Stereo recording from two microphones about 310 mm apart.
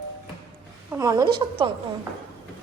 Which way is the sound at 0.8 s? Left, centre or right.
Centre.